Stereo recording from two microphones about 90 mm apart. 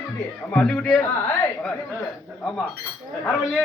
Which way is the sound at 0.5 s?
5° left (ahead or behind).